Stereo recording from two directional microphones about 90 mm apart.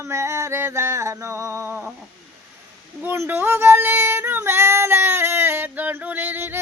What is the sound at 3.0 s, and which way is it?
Female singing, 25° right (ahead or behind).